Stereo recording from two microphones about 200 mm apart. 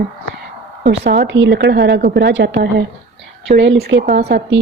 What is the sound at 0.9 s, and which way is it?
A woman's voice, 60° right (ahead or behind).